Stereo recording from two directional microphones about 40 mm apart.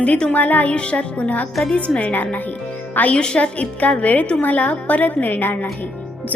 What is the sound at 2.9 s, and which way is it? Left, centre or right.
Speech, left.